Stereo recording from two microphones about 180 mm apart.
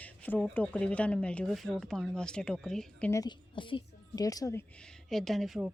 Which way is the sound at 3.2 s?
25° left (ahead or behind).